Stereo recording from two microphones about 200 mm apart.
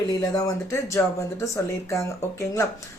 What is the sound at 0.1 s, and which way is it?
Speech, 20° left (ahead or behind).